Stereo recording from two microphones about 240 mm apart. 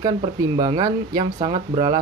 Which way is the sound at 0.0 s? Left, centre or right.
Centre.